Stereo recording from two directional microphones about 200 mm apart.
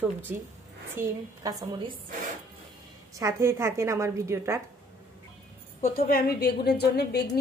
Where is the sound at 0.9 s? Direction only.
15° right (ahead or behind).